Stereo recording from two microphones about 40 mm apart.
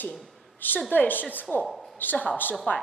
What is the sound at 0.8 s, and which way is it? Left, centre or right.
A woman's voice, left.